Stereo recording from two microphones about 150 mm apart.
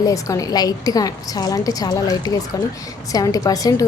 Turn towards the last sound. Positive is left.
turn(degrees=25)  # may be behind; listen again after turning